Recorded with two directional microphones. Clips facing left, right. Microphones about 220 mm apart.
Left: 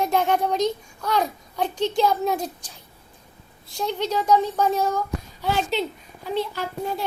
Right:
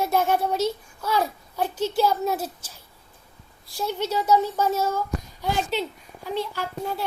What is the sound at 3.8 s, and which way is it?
A child's voice, 10° right (ahead or behind).